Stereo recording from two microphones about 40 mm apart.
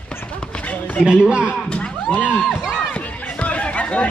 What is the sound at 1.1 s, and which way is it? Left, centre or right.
Speech, right.